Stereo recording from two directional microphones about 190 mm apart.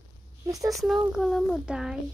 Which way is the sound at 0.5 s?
20° right (ahead or behind).